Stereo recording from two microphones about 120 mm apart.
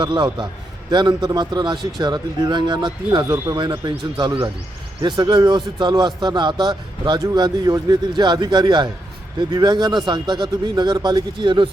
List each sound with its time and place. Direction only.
0.0 s speech: 40° right (ahead or behind)
3.2 s speech: 30° right (ahead or behind)
3.8 s speech: 40° right (ahead or behind)